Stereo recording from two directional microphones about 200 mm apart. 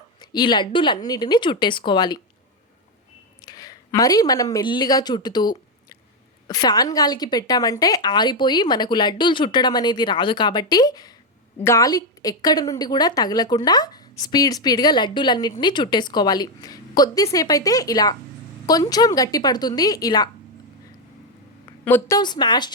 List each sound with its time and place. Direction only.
0.2 s a woman's voice: 20° left (ahead or behind)
3.4 s a woman's voice: 20° left (ahead or behind)
21.8 s a woman's voice: 10° left (ahead or behind)